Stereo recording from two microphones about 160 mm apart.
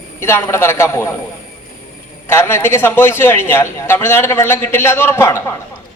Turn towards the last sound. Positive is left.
turn(degrees=15)  # may be behind; listen again after turning